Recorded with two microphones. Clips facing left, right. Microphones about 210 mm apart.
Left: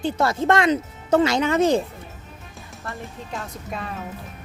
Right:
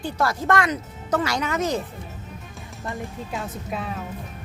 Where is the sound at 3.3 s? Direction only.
Centre (ahead or behind).